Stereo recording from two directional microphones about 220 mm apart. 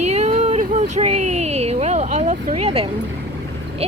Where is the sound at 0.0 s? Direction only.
30° right (ahead or behind).